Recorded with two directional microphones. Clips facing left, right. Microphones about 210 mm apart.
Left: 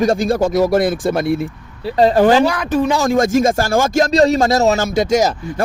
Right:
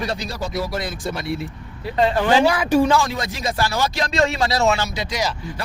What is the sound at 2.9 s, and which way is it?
A man's voice, 45° left (ahead or behind).